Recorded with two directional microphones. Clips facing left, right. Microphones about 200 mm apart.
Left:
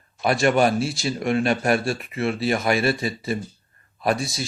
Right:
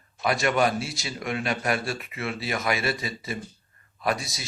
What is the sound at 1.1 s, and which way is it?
A man's voice, 45° left (ahead or behind).